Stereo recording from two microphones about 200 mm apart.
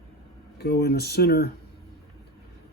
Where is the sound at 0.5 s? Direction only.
55° left (ahead or behind).